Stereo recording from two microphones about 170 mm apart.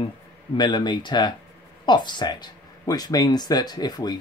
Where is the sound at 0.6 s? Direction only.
25° left (ahead or behind).